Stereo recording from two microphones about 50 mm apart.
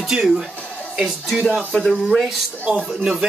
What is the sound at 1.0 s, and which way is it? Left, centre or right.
Speech, centre.